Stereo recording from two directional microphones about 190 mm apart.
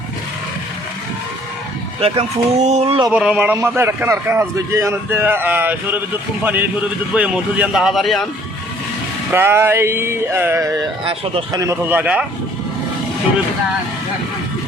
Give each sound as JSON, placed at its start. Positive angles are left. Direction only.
{"t": 2.0, "sound": "speech", "side_deg": -30}
{"t": 3.1, "sound": "a man's voice", "side_deg": -5}
{"t": 9.3, "sound": "a man's voice", "side_deg": -10}
{"t": 11.0, "sound": "speech", "side_deg": -30}
{"t": 11.5, "sound": "a man's voice", "side_deg": -15}